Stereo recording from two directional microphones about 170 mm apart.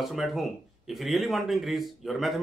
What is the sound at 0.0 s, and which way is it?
Speech, centre (ahead or behind).